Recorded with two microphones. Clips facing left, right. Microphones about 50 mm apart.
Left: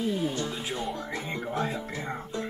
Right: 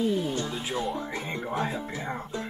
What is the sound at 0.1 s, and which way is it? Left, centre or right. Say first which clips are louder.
Music: right 1 dB; centre.